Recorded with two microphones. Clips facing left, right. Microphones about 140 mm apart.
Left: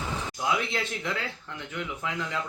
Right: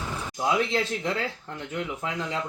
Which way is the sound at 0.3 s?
35° right (ahead or behind).